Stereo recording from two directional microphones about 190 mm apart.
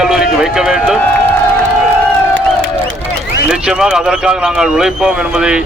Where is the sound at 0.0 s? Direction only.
Centre (ahead or behind).